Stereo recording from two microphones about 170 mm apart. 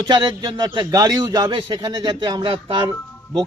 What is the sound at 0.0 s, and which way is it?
Speech, 25° right (ahead or behind).